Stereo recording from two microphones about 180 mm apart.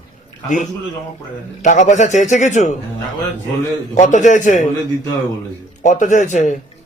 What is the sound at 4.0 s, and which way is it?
Speech, 40° left (ahead or behind).